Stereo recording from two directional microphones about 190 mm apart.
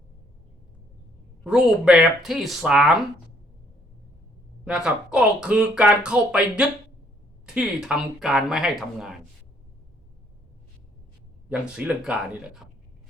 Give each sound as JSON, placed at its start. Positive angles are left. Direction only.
{"t": 1.5, "sound": "speech", "side_deg": -5}
{"t": 4.6, "sound": "speech", "side_deg": -5}
{"t": 11.4, "sound": "speech", "side_deg": -5}
{"t": 12.6, "sound": "a sound", "side_deg": 0}